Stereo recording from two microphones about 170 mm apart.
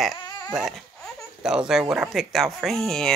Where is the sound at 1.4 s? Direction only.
5° right (ahead or behind).